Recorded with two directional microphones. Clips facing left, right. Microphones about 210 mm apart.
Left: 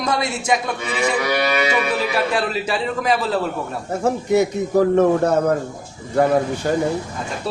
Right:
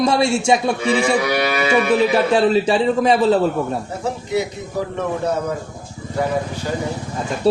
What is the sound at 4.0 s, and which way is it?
A man's voice, 50° left (ahead or behind).